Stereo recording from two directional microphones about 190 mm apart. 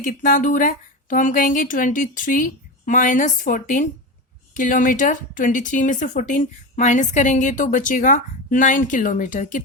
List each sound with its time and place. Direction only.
0.0 s speech: 45° left (ahead or behind)